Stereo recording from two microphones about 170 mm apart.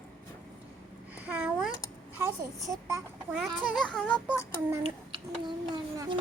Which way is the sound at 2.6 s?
15° right (ahead or behind).